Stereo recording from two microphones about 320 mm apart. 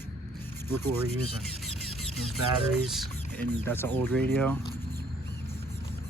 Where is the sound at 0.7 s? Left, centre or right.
Centre.